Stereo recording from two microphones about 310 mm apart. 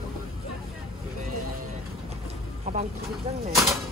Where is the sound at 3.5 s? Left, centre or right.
Centre.